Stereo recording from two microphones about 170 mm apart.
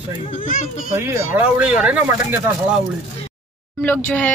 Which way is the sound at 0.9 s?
15° right (ahead or behind).